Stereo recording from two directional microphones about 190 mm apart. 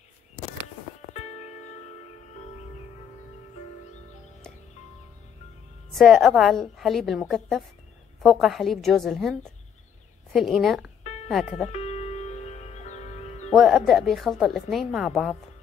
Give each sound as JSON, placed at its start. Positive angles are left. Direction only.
{"t": 1.1, "sound": "music", "side_deg": 40}
{"t": 5.9, "sound": "a woman's voice", "side_deg": 0}
{"t": 11.7, "sound": "music", "side_deg": 35}
{"t": 13.5, "sound": "a woman's voice", "side_deg": 0}